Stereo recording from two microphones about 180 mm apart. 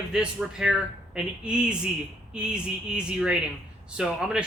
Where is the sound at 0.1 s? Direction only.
5° right (ahead or behind).